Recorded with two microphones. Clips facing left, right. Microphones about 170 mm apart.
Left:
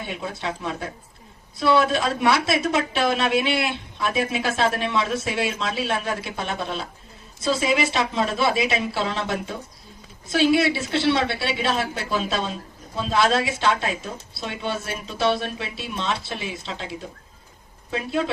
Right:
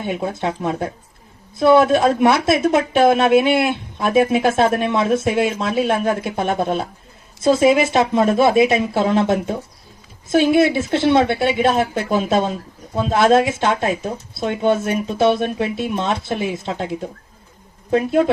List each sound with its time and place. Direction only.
0.0 s speech: 50° right (ahead or behind)
17.9 s speech: 50° right (ahead or behind)